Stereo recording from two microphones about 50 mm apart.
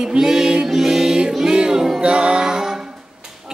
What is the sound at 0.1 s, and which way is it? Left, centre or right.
Music, centre.